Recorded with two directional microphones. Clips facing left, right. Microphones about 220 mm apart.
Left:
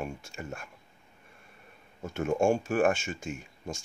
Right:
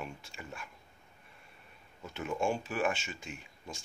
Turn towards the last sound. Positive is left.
turn(degrees=45)  # may be behind; listen again after turning